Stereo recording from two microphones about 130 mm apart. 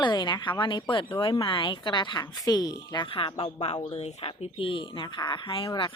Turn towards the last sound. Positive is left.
turn(degrees=40)  # may be behind; listen again after turning